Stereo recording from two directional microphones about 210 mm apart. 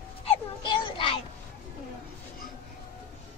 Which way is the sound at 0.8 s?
25° left (ahead or behind).